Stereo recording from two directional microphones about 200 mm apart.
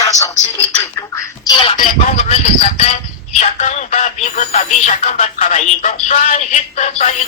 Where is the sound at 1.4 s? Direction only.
20° left (ahead or behind).